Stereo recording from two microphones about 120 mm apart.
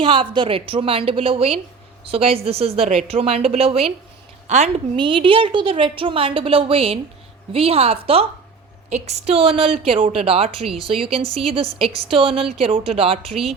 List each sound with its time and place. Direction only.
0.0 s a woman's voice: 45° right (ahead or behind)
4.4 s a woman's voice: 70° right (ahead or behind)
4.9 s a woman's voice: 45° right (ahead or behind)
8.9 s a woman's voice: 65° right (ahead or behind)